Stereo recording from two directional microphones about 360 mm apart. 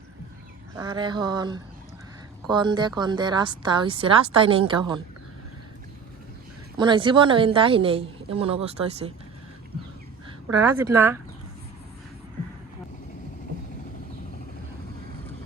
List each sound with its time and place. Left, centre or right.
0.8 s a woman's voice: centre
6.7 s a woman's voice: centre
10.8 s a woman's voice: centre